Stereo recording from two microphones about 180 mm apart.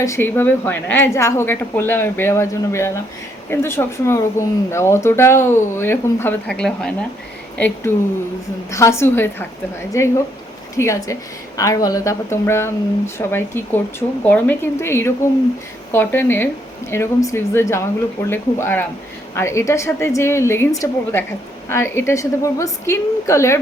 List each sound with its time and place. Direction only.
0.0 s a woman's voice: 15° left (ahead or behind)